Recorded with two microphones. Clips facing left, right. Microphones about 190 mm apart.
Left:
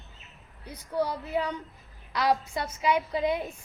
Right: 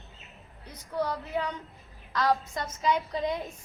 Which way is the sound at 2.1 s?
10° left (ahead or behind).